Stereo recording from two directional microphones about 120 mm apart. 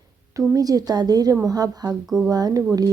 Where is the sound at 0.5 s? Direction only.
30° right (ahead or behind).